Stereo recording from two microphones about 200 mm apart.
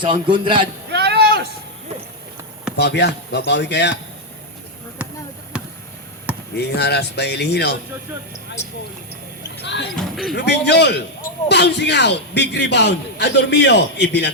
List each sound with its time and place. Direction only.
0.0 s a man's voice: 25° right (ahead or behind)
0.9 s a sound: 55° right (ahead or behind)
2.7 s a man's voice: 55° left (ahead or behind)
6.6 s a man's voice: 55° left (ahead or behind)
9.9 s speech: centre (ahead or behind)
10.3 s a man's voice: 55° left (ahead or behind)